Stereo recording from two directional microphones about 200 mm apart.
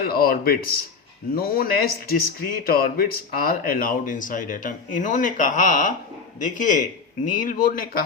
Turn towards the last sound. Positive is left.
turn(degrees=45)  # may be behind; listen again after turning